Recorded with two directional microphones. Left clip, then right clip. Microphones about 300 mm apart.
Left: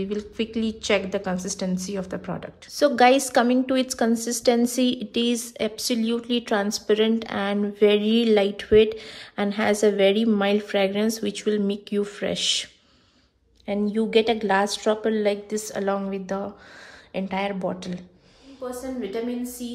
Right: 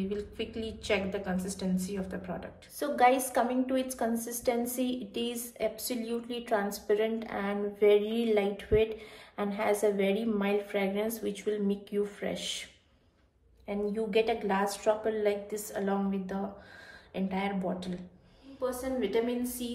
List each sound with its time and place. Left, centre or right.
0.1 s a woman's voice: left
13.7 s a woman's voice: left